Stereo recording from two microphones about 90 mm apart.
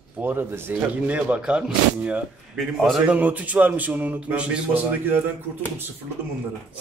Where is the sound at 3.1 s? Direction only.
20° right (ahead or behind).